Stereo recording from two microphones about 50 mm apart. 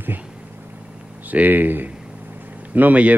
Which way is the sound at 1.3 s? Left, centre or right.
Right.